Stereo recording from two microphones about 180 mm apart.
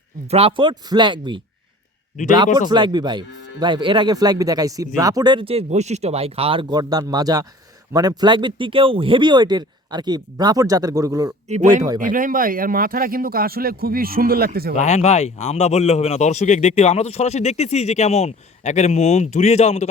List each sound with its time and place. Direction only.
0.3 s speech: 35° right (ahead or behind)
2.6 s speech: 25° right (ahead or behind)
11.4 s speech: 40° right (ahead or behind); by 14.7 s 55° right (ahead or behind)
14.8 s speech: 40° left (ahead or behind)